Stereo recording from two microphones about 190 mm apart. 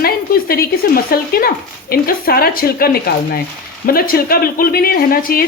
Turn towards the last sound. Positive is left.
turn(degrees=50)  # may be behind; listen again after turning